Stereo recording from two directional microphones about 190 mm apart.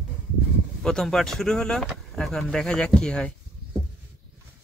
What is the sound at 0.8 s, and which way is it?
Speech, centre (ahead or behind).